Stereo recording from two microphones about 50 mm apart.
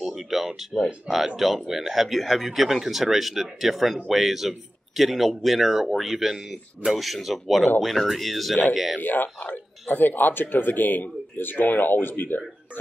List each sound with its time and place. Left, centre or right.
0.0 s a sound: centre
0.7 s speech: centre
1.1 s speech: centre
9.0 s speech: left